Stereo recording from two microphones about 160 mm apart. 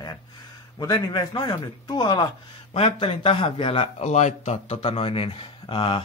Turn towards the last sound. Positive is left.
turn(degrees=35)  # may be behind; listen again after turning